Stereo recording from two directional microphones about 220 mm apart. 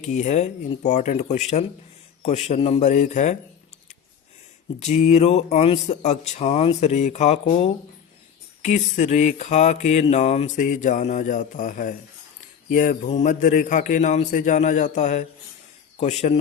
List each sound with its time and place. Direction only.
0.0 s mantra: 30° left (ahead or behind)
4.8 s mantra: 30° left (ahead or behind)
16.0 s speech: 30° left (ahead or behind)